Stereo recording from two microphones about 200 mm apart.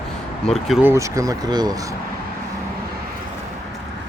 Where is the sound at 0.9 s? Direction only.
15° right (ahead or behind).